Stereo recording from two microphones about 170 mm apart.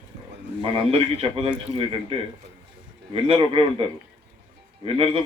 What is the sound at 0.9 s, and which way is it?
A man's voice, 35° right (ahead or behind).